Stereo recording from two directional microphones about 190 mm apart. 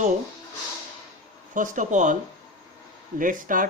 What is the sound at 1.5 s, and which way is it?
Speech, 45° right (ahead or behind).